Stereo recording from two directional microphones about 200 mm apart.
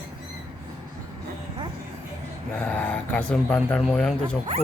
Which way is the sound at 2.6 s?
10° left (ahead or behind).